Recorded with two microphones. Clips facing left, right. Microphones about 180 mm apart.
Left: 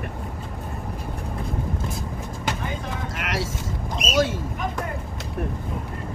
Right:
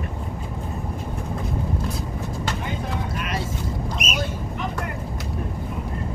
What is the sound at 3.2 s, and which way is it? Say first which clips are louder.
Boat: left 1 dB; 90° left.